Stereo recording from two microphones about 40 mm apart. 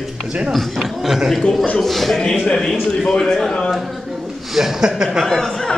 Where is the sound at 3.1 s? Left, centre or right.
Centre.